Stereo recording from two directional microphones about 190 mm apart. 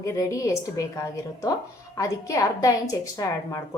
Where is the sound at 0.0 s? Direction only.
15° left (ahead or behind).